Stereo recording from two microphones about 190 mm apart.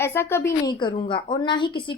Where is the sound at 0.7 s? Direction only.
25° left (ahead or behind).